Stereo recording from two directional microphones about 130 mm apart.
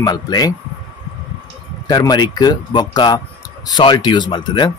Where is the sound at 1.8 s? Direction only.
30° left (ahead or behind).